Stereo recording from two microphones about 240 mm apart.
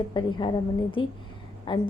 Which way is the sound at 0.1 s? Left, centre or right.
Centre.